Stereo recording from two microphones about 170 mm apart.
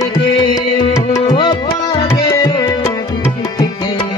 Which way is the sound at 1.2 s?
30° left (ahead or behind).